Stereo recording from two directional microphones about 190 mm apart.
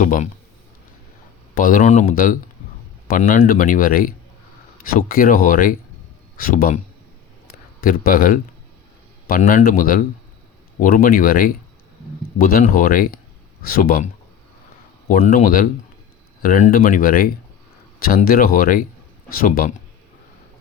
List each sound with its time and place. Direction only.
0.0 s speech: 45° left (ahead or behind)
1.5 s speech: 45° left (ahead or behind)
7.8 s speech: 50° left (ahead or behind)
15.1 s speech: 40° left (ahead or behind)